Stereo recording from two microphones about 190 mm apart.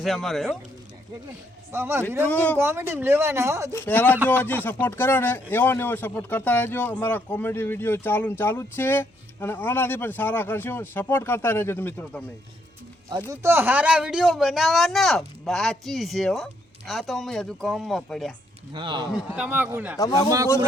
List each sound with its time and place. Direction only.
0.0 s speech: centre (ahead or behind)
1.7 s speech: 15° right (ahead or behind)
2.2 s speech: 10° left (ahead or behind)
2.6 s speech: 10° right (ahead or behind)
3.7 s speech: 10° left (ahead or behind)
13.3 s speech: 15° right (ahead or behind)
18.7 s speech: 25° right (ahead or behind)
19.3 s speech: 10° right (ahead or behind)
20.0 s a man's voice: 20° left (ahead or behind)